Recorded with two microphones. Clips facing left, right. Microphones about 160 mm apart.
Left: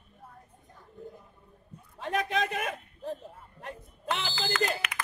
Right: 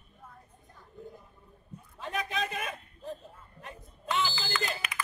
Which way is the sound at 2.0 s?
70° left (ahead or behind).